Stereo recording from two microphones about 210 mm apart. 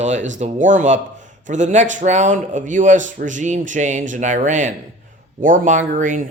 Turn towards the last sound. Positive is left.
turn(degrees=-40)  # may be behind; listen again after turning